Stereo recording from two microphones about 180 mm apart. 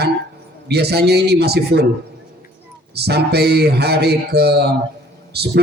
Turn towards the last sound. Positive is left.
turn(degrees=-65)  # may be behind; listen again after turning